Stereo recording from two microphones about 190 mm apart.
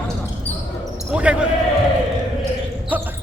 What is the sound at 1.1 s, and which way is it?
Speech, 5° right (ahead or behind).